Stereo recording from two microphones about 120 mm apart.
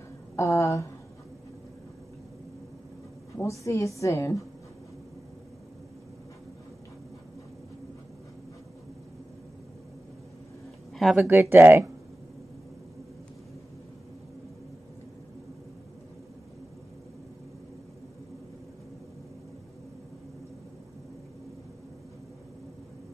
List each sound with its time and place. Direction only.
0.4 s a woman's voice: 25° left (ahead or behind)
3.3 s a woman's voice: 25° left (ahead or behind)
11.0 s speech: centre (ahead or behind)
11.2 s speech: 20° right (ahead or behind)